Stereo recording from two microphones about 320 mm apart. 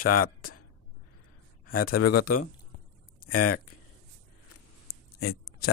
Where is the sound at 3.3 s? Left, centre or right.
Left.